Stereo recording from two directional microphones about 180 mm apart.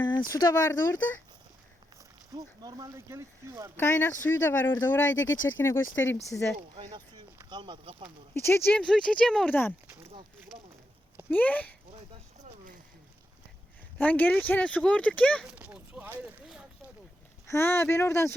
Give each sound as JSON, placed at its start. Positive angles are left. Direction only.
{"t": 0.0, "sound": "speech", "side_deg": 25}
{"t": 2.3, "sound": "speech", "side_deg": -20}
{"t": 3.8, "sound": "speech", "side_deg": 10}
{"t": 5.3, "sound": "speech", "side_deg": 90}
{"t": 5.5, "sound": "speech", "side_deg": 15}
{"t": 5.8, "sound": "speech", "side_deg": 90}
{"t": 6.3, "sound": "speech", "side_deg": 10}
{"t": 6.7, "sound": "speech", "side_deg": -25}
{"t": 8.3, "sound": "speech", "side_deg": 15}
{"t": 11.3, "sound": "speech", "side_deg": 10}
{"t": 12.4, "sound": "a sound", "side_deg": -45}
{"t": 14.0, "sound": "speech", "side_deg": 10}
{"t": 15.4, "sound": "a sound", "side_deg": -5}
{"t": 17.4, "sound": "speech", "side_deg": 15}